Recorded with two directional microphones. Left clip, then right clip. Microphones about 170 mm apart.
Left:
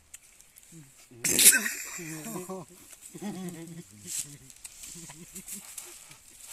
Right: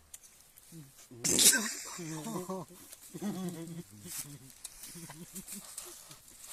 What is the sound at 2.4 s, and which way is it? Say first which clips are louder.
Speech: left 1 dB; 5° right (ahead or behind).